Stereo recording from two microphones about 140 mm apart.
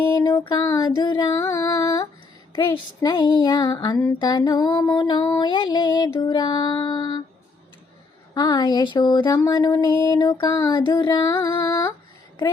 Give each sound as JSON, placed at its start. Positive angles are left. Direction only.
{"t": 0.1, "sound": "music", "side_deg": 25}
{"t": 1.4, "sound": "speech", "side_deg": 20}
{"t": 5.4, "sound": "music", "side_deg": 35}
{"t": 8.4, "sound": "speech", "side_deg": 30}